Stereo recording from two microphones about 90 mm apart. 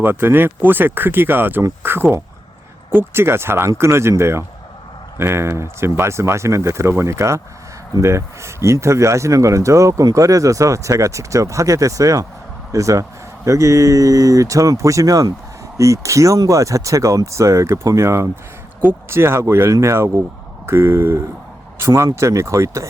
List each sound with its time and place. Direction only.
0.0 s speech: 25° right (ahead or behind)